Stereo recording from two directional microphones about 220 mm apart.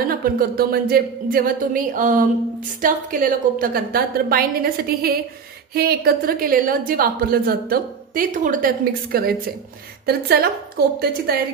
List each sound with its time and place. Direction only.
0.1 s a woman's voice: 40° right (ahead or behind)